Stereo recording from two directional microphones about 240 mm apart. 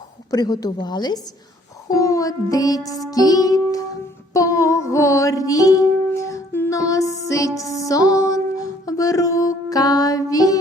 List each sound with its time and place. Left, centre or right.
0.3 s music: centre